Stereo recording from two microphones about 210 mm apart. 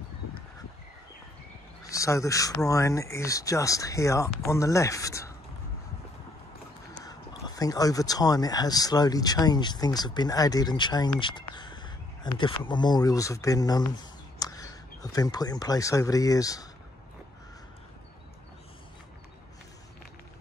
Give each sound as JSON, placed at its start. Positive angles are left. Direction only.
{"t": 1.9, "sound": "speech", "side_deg": 15}
{"t": 6.9, "sound": "speech", "side_deg": 20}